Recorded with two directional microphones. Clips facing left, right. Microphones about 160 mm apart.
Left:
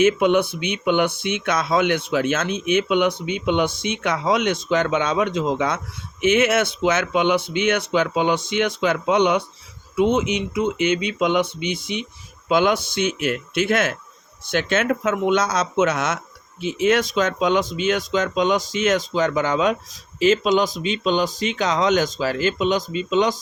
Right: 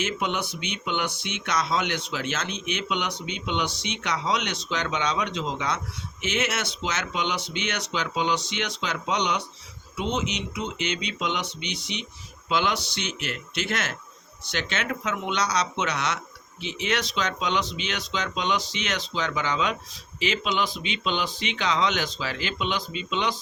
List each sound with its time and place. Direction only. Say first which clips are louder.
0.0 s speech: left 12 dB; 55° left (ahead or behind)